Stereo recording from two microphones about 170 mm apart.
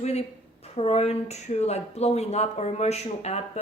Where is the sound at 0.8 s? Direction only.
35° left (ahead or behind).